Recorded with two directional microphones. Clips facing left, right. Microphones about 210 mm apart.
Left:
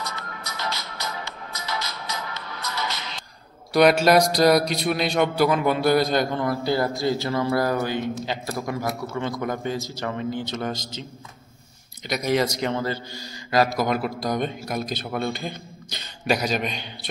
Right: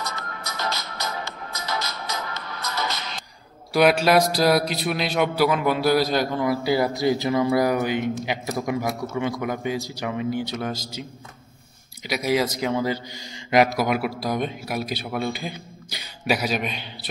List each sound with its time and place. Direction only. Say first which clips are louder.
0.0 s music: right 1 dB; 45° right (ahead or behind)
3.7 s speech: left 1 dB; 5° right (ahead or behind)
12.1 s speech: even; 5° right (ahead or behind)